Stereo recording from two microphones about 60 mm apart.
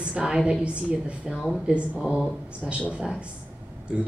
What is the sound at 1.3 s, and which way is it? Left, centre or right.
Speech, centre.